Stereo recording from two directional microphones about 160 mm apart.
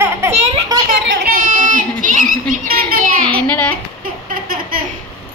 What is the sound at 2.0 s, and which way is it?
Speech, 55° right (ahead or behind).